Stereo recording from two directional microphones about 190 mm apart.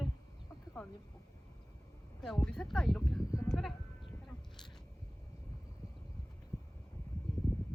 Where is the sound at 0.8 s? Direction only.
5° left (ahead or behind).